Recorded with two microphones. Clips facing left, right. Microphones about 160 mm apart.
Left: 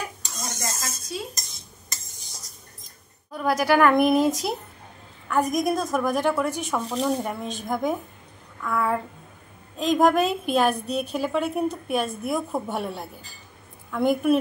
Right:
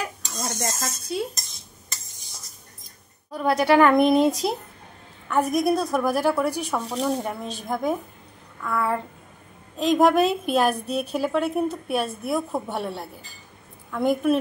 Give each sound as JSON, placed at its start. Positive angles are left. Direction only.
{"t": 0.6, "sound": "dishes", "side_deg": -60}
{"t": 3.3, "sound": "a woman's voice", "side_deg": 0}